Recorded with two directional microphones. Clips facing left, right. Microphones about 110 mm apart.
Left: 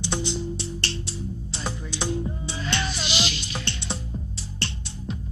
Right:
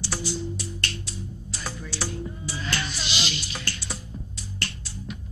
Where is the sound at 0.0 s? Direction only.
20° left (ahead or behind).